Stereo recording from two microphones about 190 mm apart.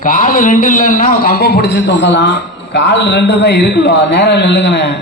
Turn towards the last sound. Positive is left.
turn(degrees=65)  # may be behind; listen again after turning